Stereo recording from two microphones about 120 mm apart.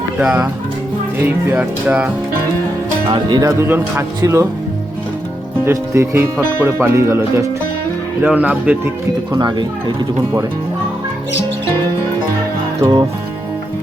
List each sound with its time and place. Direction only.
0.2 s music: 5° right (ahead or behind)
1.2 s music: 20° right (ahead or behind)
3.1 s speech: 40° right (ahead or behind)
3.4 s speech: 20° right (ahead or behind)
5.6 s speech: 20° right (ahead or behind)
8.2 s music: 10° right (ahead or behind)
9.3 s speech: 35° right (ahead or behind)
12.8 s music: 35° right (ahead or behind)